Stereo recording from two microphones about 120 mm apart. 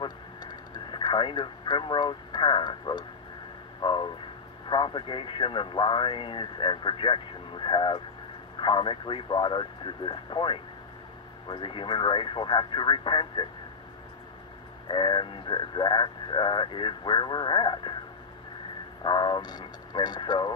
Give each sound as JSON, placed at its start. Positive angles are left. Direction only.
{"t": 0.0, "sound": "radio", "side_deg": 40}
{"t": 3.8, "sound": "speech", "side_deg": 40}
{"t": 14.9, "sound": "speech", "side_deg": 40}
{"t": 19.0, "sound": "speech", "side_deg": 35}